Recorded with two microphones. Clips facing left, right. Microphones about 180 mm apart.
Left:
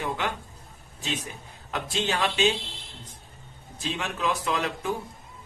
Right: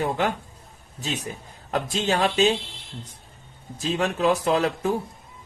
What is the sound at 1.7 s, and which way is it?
Speech, 40° right (ahead or behind).